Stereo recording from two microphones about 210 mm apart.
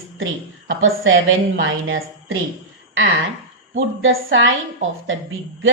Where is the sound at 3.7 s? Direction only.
65° right (ahead or behind).